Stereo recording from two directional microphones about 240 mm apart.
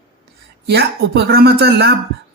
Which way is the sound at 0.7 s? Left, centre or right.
Right.